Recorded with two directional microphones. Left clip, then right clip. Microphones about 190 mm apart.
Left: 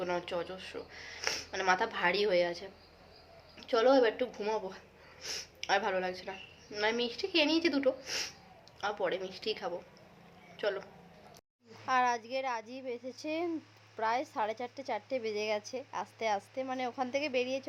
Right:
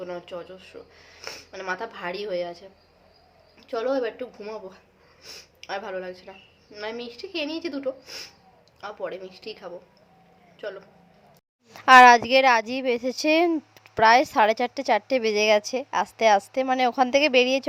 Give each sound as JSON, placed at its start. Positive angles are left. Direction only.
{"t": 0.0, "sound": "a woman's voice", "side_deg": 5}
{"t": 11.9, "sound": "speech", "side_deg": -50}